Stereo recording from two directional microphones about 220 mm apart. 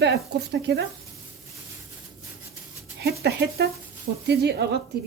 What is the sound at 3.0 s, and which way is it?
Speech, 45° right (ahead or behind).